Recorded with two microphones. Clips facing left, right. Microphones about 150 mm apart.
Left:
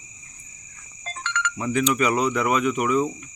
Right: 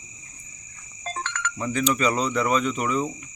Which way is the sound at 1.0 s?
45° right (ahead or behind).